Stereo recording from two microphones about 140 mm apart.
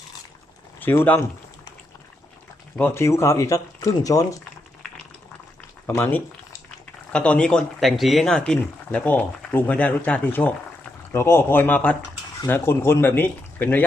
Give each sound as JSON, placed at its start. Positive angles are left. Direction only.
{"t": 0.8, "sound": "speech", "side_deg": 15}
{"t": 2.7, "sound": "speech", "side_deg": 15}
{"t": 5.8, "sound": "speech", "side_deg": 15}